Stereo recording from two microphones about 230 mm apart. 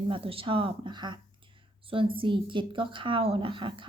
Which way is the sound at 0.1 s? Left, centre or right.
Right.